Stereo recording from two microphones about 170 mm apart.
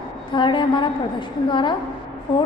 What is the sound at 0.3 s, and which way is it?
A woman's voice, 25° left (ahead or behind).